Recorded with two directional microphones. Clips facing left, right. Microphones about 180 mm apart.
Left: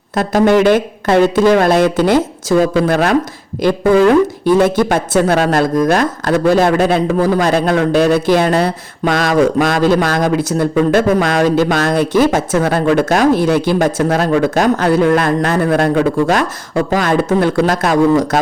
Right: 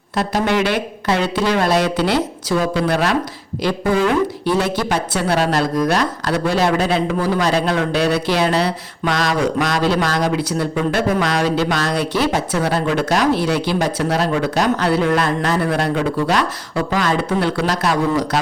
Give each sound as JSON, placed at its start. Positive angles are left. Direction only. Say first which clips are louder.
{"t": 0.2, "sound": "speech", "louder": "left 7 dB", "side_deg": 50}